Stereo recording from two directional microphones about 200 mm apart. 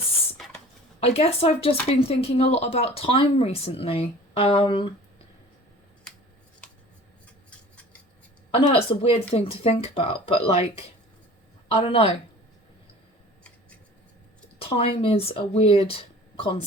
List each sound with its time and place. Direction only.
0.9 s speech: 30° left (ahead or behind)
8.5 s speech: 30° left (ahead or behind)
14.6 s speech: 30° left (ahead or behind)